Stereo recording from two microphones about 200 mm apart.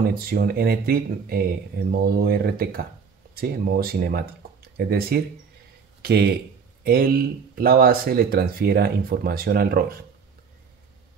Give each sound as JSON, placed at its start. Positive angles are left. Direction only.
{"t": 0.0, "sound": "speech", "side_deg": -45}